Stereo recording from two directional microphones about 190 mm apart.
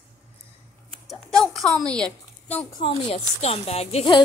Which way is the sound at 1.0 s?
Centre (ahead or behind).